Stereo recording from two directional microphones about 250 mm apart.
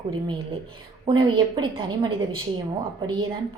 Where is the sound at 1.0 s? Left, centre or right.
Centre.